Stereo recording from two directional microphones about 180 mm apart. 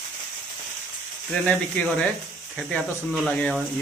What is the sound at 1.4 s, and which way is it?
Speech, 10° left (ahead or behind).